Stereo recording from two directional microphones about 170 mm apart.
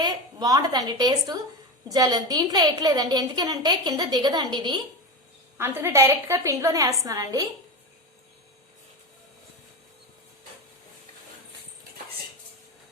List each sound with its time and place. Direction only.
0.0 s a woman's voice: 25° right (ahead or behind)
5.5 s a woman's voice: 15° right (ahead or behind)